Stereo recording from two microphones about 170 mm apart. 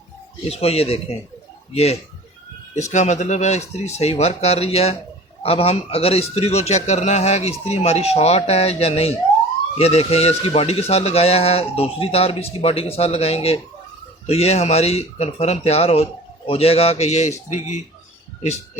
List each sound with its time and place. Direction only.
0.4 s speech: 35° left (ahead or behind)